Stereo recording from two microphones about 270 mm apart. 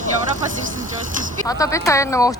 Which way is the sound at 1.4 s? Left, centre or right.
Centre.